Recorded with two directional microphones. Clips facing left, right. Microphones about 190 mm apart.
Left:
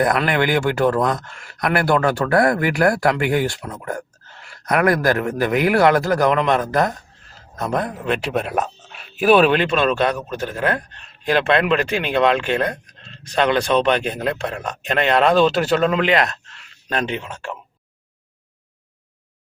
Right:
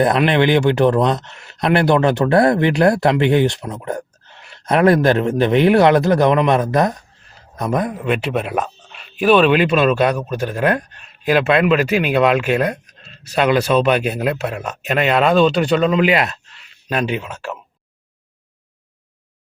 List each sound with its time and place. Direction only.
0.3 s speech: 20° right (ahead or behind)
7.3 s a sound: 15° right (ahead or behind)
7.9 s speech: 5° right (ahead or behind)
9.5 s a man's voice: 10° right (ahead or behind)